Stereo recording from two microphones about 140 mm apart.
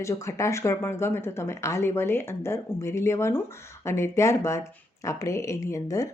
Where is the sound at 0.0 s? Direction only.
20° left (ahead or behind).